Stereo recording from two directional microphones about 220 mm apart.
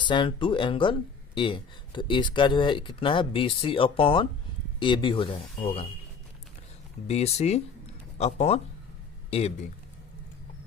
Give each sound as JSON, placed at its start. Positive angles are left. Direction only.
{"t": 0.0, "sound": "speech", "side_deg": 20}
{"t": 7.1, "sound": "speech", "side_deg": 30}